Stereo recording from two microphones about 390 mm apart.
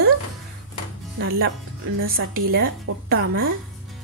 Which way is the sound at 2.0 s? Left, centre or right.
Right.